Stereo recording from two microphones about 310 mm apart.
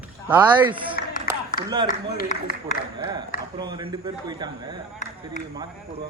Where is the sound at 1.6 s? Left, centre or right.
Left.